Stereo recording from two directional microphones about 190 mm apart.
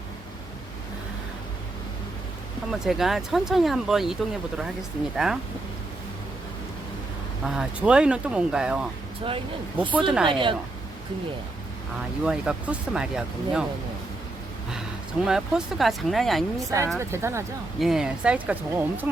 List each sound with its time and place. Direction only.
2.7 s speech: centre (ahead or behind)
7.4 s speech: 5° right (ahead or behind)
10.2 s speech: 25° right (ahead or behind)
12.2 s speech: 5° right (ahead or behind)
15.3 s speech: 5° right (ahead or behind)
16.6 s speech: 15° right (ahead or behind)
17.7 s speech: centre (ahead or behind)